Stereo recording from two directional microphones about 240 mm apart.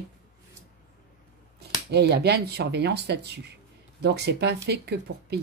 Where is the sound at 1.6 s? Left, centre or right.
Right.